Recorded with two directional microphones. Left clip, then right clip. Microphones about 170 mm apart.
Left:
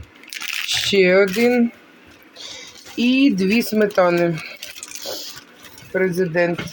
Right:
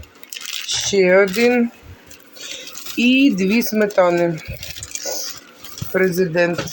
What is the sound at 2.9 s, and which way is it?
Speech, centre (ahead or behind).